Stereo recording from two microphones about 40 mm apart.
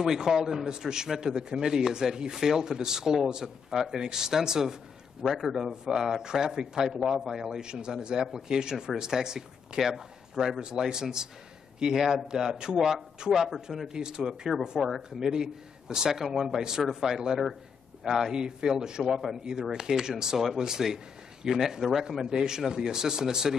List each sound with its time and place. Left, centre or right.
0.0 s speech: centre
6.9 s speech: centre